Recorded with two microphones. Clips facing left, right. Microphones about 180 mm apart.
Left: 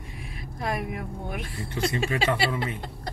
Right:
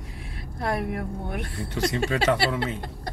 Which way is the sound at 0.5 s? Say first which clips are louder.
Right 3 dB; 60° right (ahead or behind).